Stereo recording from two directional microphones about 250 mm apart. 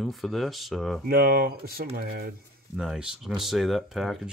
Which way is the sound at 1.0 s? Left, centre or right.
Right.